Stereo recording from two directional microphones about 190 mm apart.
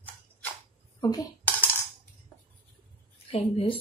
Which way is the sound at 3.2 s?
30° left (ahead or behind).